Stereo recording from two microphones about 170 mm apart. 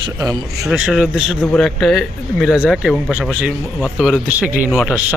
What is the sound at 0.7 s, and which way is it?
Speech, 5° right (ahead or behind).